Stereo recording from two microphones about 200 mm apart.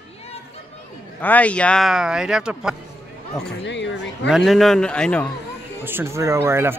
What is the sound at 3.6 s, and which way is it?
Speech, 65° left (ahead or behind).